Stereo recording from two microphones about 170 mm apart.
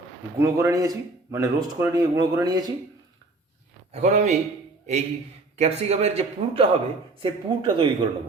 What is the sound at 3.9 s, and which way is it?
Speech, 45° right (ahead or behind).